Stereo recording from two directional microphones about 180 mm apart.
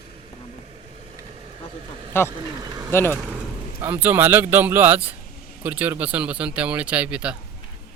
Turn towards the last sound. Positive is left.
turn(degrees=-5)  # may be behind; listen again after turning